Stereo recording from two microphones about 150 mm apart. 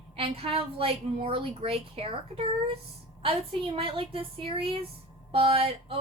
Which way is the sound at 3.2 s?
35° right (ahead or behind).